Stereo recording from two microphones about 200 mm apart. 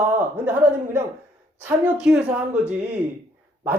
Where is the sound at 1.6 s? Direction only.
5° right (ahead or behind).